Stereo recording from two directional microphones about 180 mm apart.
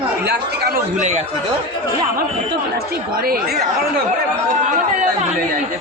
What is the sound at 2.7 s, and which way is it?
Speech, 60° right (ahead or behind).